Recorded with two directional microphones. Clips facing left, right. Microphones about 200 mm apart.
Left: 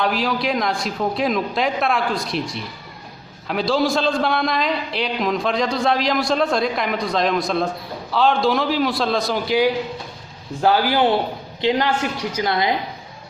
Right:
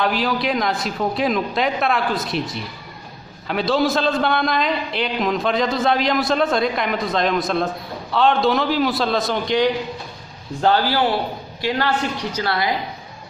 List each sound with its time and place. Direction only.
0.0 s a man's voice: centre (ahead or behind); by 12.7 s 20° left (ahead or behind)